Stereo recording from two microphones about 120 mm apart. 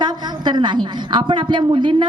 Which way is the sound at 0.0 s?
40° right (ahead or behind).